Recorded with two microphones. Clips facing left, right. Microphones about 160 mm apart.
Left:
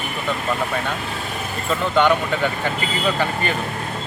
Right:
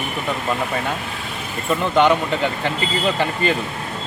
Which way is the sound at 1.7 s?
20° right (ahead or behind).